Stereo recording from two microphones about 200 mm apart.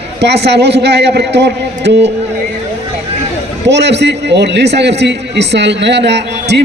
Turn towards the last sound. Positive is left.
turn(degrees=-60)  # may be behind; listen again after turning